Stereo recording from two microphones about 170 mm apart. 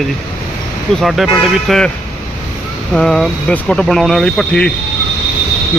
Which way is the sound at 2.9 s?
Centre (ahead or behind).